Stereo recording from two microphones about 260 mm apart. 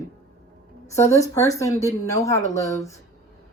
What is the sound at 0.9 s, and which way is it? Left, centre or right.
Speech, left.